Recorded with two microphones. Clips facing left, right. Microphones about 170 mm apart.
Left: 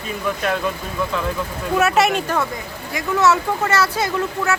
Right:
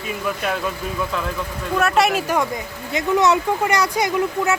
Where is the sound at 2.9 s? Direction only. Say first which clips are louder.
Right 1 dB; 20° right (ahead or behind).